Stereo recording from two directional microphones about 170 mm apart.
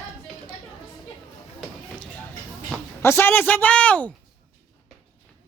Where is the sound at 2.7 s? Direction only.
15° left (ahead or behind).